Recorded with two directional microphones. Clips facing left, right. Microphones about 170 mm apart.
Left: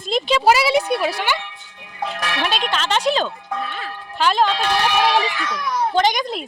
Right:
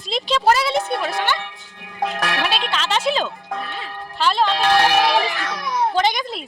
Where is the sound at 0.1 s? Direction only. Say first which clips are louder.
Left 2 dB; 5° left (ahead or behind).